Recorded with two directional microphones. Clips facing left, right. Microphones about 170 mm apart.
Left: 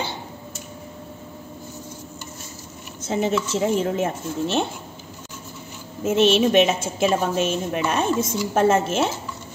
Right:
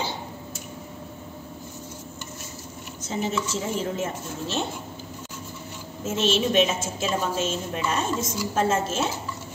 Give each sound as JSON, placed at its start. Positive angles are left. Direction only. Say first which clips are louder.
{"t": 3.1, "sound": "a woman's voice", "louder": "left 5 dB", "side_deg": 65}
{"t": 6.0, "sound": "a woman's voice", "louder": "left 6 dB", "side_deg": 60}